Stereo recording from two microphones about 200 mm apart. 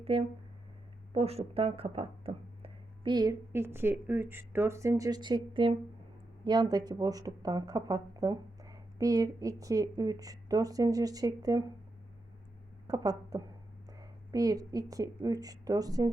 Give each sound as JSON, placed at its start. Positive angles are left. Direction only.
{"t": 0.0, "sound": "speech", "side_deg": -30}
{"t": 12.9, "sound": "a woman's voice", "side_deg": -20}